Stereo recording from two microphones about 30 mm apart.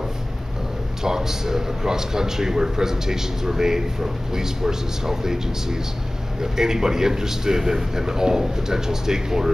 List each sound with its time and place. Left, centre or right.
1.0 s a man's voice: centre